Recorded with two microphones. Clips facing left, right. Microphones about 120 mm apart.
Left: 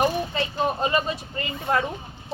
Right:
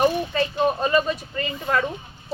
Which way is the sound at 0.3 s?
20° left (ahead or behind).